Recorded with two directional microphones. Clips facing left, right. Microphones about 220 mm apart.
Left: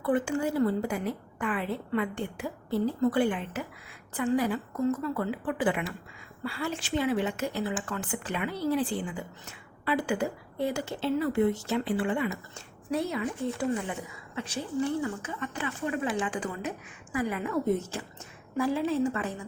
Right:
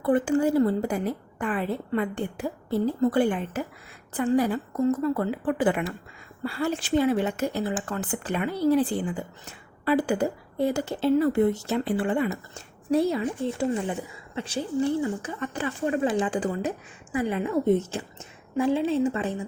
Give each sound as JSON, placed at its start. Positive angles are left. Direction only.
{"t": 0.0, "sound": "a woman's voice", "side_deg": -35}